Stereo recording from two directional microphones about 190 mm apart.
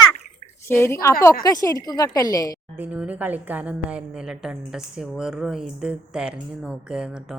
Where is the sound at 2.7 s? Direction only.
10° right (ahead or behind).